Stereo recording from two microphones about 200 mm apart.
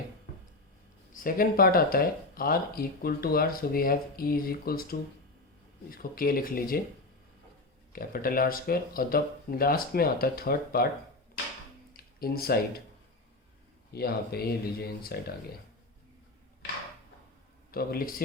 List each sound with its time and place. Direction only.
1.1 s speech: 45° left (ahead or behind)
7.9 s speech: 45° left (ahead or behind)
12.2 s speech: 50° left (ahead or behind)
13.9 s speech: 50° left (ahead or behind)
17.7 s a man's voice: 45° left (ahead or behind)